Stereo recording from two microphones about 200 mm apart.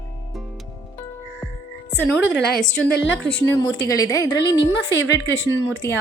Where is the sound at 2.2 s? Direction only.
60° left (ahead or behind).